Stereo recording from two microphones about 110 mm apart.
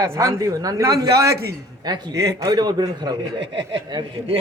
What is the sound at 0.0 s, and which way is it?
A man's voice, 30° right (ahead or behind).